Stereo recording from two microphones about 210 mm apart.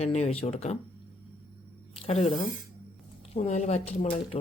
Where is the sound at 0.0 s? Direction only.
30° left (ahead or behind).